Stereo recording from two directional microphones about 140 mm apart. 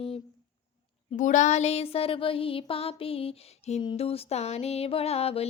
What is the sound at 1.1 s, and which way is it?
Speech, 60° left (ahead or behind).